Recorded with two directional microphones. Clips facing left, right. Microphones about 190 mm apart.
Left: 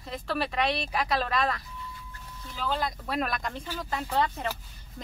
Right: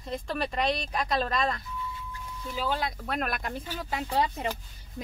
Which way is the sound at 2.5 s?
10° right (ahead or behind).